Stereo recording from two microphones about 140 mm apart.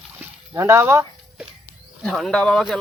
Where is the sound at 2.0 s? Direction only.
5° left (ahead or behind).